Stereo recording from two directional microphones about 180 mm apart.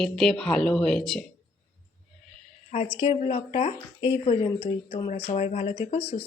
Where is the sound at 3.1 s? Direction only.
35° left (ahead or behind).